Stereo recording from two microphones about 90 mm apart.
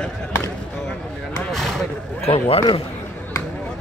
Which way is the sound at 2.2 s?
90° left.